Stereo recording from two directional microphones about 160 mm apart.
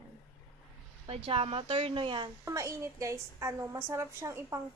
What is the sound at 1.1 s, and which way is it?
Speech, 35° right (ahead or behind).